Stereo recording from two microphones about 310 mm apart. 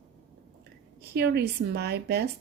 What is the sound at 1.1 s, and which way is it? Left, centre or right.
A woman's voice, right.